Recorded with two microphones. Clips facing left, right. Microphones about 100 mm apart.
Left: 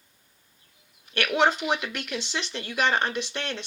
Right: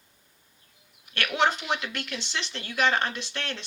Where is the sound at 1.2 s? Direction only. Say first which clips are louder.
Left 3 dB; 5° left (ahead or behind).